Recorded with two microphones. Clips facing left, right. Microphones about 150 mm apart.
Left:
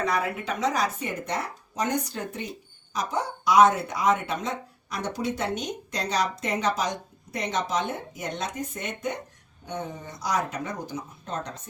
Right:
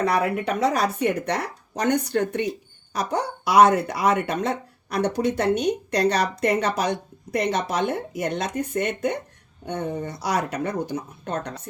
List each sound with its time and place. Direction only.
0.0 s speech: 60° right (ahead or behind)